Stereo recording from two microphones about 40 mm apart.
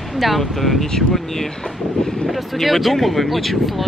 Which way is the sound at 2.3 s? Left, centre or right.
Centre.